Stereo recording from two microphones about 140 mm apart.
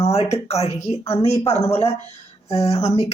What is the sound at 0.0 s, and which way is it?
Speech, 45° left (ahead or behind).